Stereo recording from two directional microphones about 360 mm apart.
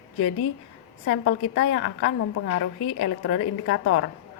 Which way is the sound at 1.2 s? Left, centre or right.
Left.